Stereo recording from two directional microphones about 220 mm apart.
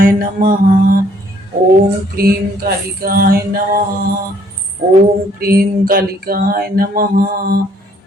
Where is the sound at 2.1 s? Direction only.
45° right (ahead or behind).